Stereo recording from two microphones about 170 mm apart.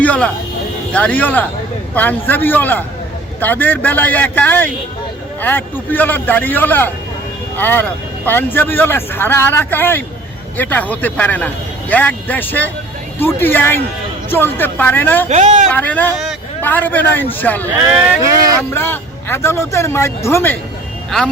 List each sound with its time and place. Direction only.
0.0 s a man's voice: 10° left (ahead or behind)
15.3 s speech: 40° right (ahead or behind)
15.7 s a man's voice: 10° left (ahead or behind)
18.7 s a man's voice: 15° left (ahead or behind)